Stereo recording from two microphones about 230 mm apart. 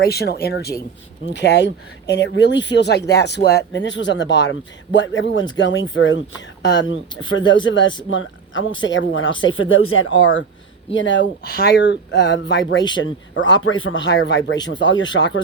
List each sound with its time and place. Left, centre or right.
0.0 s a man's voice: left